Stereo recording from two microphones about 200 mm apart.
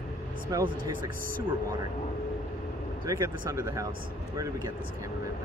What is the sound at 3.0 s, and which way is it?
Speech, 15° right (ahead or behind).